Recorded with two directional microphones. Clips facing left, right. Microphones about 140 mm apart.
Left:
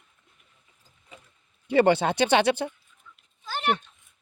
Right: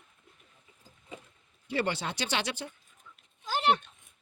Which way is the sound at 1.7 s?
60° left (ahead or behind).